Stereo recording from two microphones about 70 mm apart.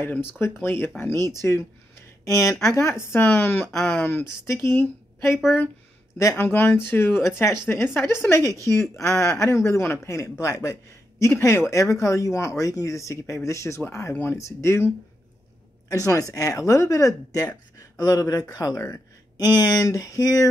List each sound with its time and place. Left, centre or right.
0.0 s speech: left
1.1 s speech: right
1.4 s speech: left
4.3 s speech: left
6.3 s a man's voice: left
15.9 s speech: left
19.3 s speech: left